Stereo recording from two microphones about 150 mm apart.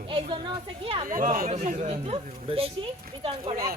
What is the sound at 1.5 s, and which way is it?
Speech, 55° right (ahead or behind).